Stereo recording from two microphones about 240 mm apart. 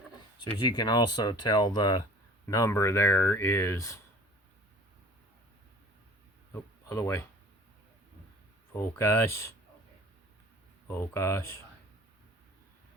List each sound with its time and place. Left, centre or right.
0.3 s speech: centre
6.5 s a sound: centre
8.7 s speech: centre
10.8 s speech: centre